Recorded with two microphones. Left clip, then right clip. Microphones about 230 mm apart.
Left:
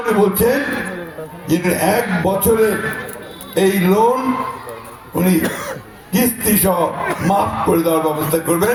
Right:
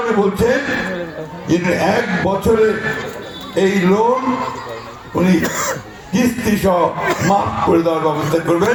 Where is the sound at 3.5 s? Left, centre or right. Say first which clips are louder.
Even; left.